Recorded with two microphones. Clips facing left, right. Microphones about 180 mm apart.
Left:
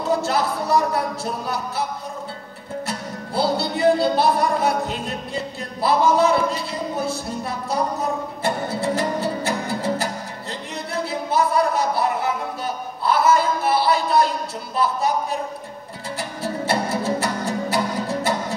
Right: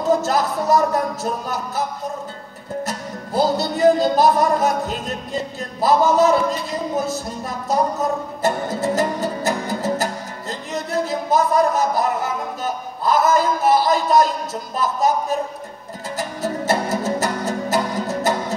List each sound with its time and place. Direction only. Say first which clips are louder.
0.0 s speech: right 3 dB; 40° right (ahead or behind)
2.9 s music: right 2 dB; 40° right (ahead or behind)
16.2 s music: right 3 dB; 40° right (ahead or behind)